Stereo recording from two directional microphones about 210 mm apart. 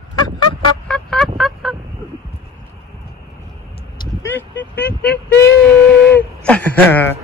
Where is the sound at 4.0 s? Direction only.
10° left (ahead or behind).